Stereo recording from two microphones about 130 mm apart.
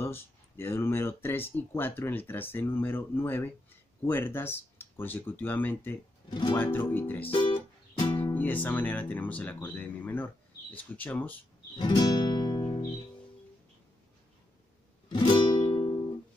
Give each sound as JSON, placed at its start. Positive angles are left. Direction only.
{"t": 0.0, "sound": "speech", "side_deg": 20}
{"t": 7.2, "sound": "music", "side_deg": 40}
{"t": 8.2, "sound": "speech", "side_deg": 15}
{"t": 11.7, "sound": "music", "side_deg": 35}
{"t": 15.0, "sound": "music", "side_deg": 35}